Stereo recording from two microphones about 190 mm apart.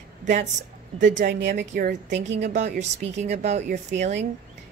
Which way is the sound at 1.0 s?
40° right (ahead or behind).